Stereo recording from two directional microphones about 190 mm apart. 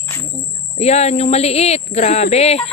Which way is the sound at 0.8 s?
35° left (ahead or behind).